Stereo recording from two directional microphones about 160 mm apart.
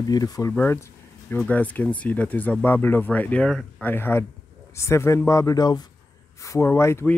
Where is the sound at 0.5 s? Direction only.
15° left (ahead or behind).